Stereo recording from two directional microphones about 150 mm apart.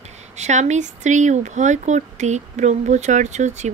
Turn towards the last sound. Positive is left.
turn(degrees=-50)  # may be behind; listen again after turning